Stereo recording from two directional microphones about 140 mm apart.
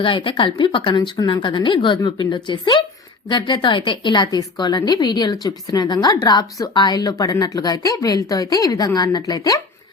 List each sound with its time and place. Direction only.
0.0 s a woman's voice: 35° left (ahead or behind)